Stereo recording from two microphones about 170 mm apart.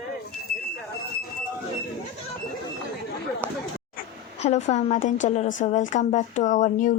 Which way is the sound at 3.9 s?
45° left (ahead or behind).